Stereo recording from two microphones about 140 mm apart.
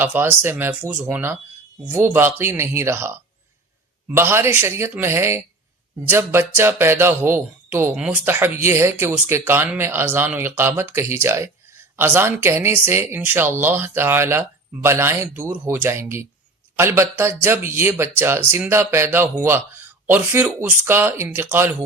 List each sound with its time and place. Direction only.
0.0 s speech: 15° right (ahead or behind)